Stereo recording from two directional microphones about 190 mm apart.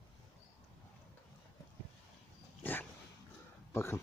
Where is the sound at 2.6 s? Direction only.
10° left (ahead or behind).